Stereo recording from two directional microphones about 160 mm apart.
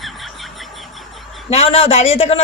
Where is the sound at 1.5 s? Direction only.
40° left (ahead or behind).